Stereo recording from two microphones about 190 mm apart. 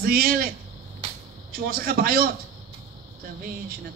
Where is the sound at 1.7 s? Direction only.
50° right (ahead or behind).